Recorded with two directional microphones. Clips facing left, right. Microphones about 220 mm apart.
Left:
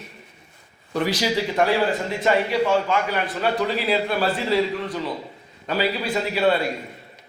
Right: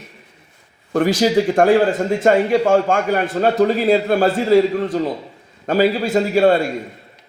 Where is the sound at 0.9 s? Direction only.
45° right (ahead or behind).